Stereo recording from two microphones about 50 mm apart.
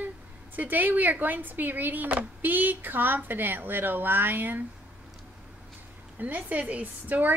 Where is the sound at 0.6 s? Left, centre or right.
Right.